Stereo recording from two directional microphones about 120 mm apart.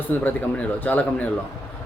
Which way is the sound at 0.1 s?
10° left (ahead or behind).